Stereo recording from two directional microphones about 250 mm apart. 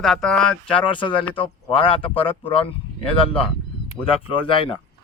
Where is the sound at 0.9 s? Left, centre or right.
Centre.